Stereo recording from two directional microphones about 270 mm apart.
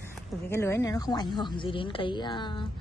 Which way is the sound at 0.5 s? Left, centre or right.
Centre.